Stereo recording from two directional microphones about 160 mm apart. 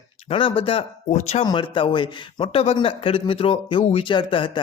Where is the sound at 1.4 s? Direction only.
30° left (ahead or behind).